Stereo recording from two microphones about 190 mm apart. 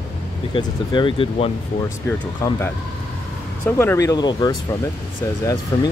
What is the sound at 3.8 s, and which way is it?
Speech, 15° left (ahead or behind).